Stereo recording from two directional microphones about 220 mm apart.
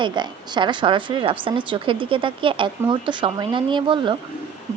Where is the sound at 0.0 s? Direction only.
20° right (ahead or behind).